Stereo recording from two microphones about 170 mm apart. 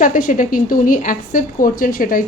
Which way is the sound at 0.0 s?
50° left (ahead or behind).